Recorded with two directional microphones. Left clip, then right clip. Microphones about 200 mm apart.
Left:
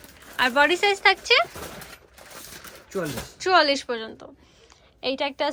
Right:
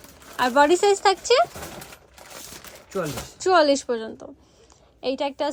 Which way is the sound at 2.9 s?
Centre (ahead or behind).